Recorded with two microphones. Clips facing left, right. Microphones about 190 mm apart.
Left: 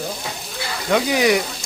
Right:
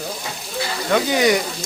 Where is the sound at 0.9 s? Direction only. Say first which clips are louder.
Even; 5° left (ahead or behind).